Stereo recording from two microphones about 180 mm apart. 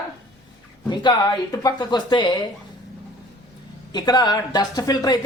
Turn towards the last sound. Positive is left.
turn(degrees=20)  # may be behind; listen again after turning